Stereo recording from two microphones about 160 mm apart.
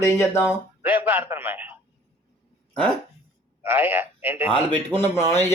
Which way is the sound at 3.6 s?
15° right (ahead or behind).